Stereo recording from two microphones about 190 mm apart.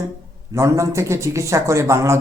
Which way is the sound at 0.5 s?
15° right (ahead or behind).